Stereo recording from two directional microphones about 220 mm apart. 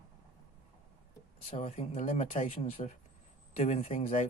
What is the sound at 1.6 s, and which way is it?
Speech, 30° left (ahead or behind).